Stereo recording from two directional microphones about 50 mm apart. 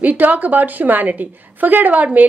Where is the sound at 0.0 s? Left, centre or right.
Right.